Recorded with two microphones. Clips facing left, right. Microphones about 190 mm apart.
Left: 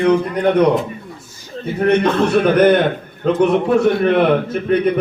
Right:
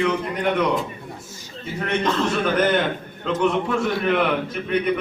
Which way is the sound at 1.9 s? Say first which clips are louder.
Left 6 dB; 60° left (ahead or behind).